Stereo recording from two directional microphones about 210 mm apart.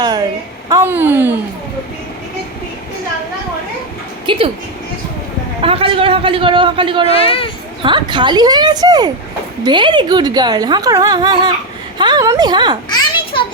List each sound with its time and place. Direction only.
0.0 s a sound: 20° right (ahead or behind)
0.7 s speech: 10° right (ahead or behind)
4.3 s a woman's voice: 25° right (ahead or behind)
5.6 s a woman's voice: 25° right (ahead or behind)
7.1 s speech: 25° left (ahead or behind)
7.8 s a woman's voice: 20° right (ahead or behind)
12.9 s children playing: 20° left (ahead or behind)